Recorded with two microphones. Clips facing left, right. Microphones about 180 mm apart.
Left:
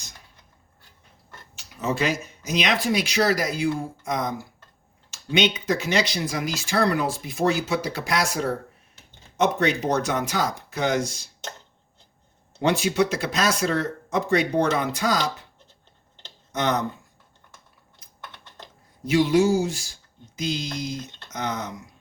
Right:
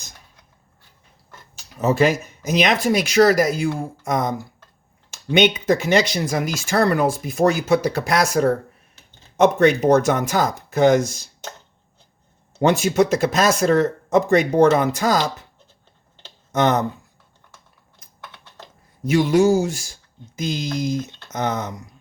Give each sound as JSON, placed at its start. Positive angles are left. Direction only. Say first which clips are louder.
{"t": 1.5, "sound": "speech", "louder": "right 8 dB", "side_deg": -45}
{"t": 5.3, "sound": "speech", "louder": "right 6 dB", "side_deg": -50}
{"t": 12.5, "sound": "speech", "louder": "right 5 dB", "side_deg": -45}
{"t": 16.5, "sound": "speech", "louder": "right 6 dB", "side_deg": -50}
{"t": 19.0, "sound": "speech", "louder": "right 3 dB", "side_deg": -45}
{"t": 21.3, "sound": "speech", "louder": "right 6 dB", "side_deg": -55}